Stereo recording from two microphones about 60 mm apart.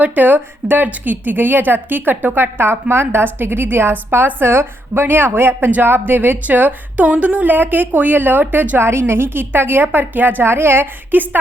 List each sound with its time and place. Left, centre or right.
0.0 s a woman's voice: right
8.8 s a woman's voice: right